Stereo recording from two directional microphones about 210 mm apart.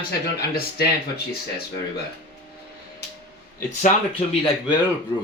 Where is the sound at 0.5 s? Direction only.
45° left (ahead or behind).